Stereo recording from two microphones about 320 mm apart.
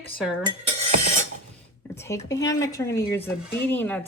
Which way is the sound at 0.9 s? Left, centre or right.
Right.